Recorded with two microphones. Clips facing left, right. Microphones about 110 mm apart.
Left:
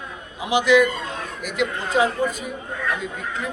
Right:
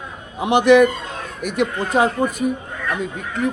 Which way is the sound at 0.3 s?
60° right (ahead or behind).